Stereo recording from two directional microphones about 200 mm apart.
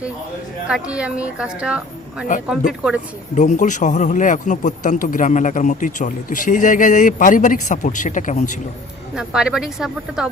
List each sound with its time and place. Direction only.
0.7 s a woman's voice: 5° right (ahead or behind)
3.3 s speech: 35° left (ahead or behind)
9.1 s a woman's voice: 5° right (ahead or behind)